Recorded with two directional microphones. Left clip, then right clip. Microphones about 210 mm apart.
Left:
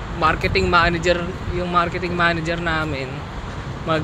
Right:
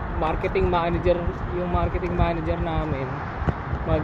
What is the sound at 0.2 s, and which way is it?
Speech, 15° left (ahead or behind).